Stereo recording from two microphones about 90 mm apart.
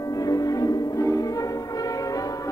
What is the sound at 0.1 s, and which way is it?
Music, 40° left (ahead or behind).